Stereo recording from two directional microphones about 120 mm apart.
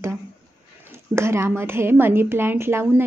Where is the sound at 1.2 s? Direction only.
20° right (ahead or behind).